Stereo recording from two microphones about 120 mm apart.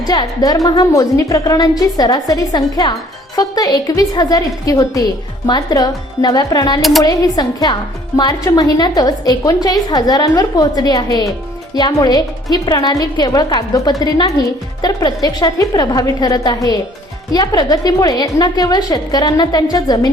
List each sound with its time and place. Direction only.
0.0 s a woman's voice: 35° left (ahead or behind)